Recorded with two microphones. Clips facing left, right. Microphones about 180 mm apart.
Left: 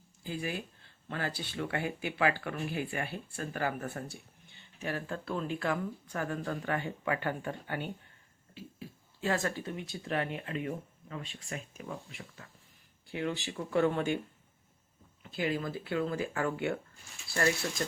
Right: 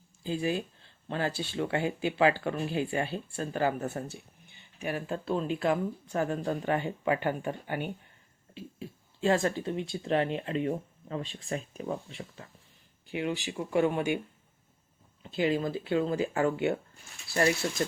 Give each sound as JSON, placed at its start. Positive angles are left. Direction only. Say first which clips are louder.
{"t": 0.2, "sound": "speech", "louder": "right 6 dB", "side_deg": -25}
{"t": 13.1, "sound": "speech", "louder": "right 3 dB", "side_deg": -15}
{"t": 15.2, "sound": "speech", "louder": "right 5 dB", "side_deg": -25}